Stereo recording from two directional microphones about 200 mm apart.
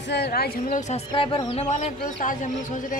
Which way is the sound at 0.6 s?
35° left (ahead or behind).